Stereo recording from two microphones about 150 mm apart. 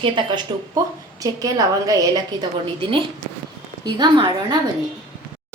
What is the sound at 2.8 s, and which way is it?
A woman's voice, 35° right (ahead or behind).